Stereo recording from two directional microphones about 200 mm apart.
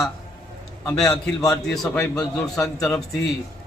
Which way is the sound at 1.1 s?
15° left (ahead or behind).